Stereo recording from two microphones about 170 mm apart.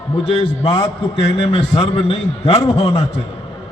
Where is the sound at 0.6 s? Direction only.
35° left (ahead or behind).